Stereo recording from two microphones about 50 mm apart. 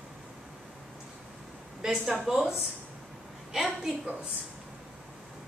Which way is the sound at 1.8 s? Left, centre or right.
Centre.